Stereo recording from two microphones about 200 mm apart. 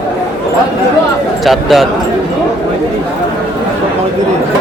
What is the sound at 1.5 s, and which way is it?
Speech, centre (ahead or behind).